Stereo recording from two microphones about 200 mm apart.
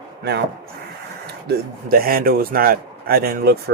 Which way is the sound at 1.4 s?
45° right (ahead or behind).